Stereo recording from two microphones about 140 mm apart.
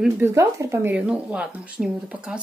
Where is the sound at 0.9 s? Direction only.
10° right (ahead or behind).